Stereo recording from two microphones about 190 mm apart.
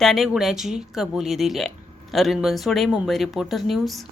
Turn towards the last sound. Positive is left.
turn(degrees=0)  # may be behind; listen again after turning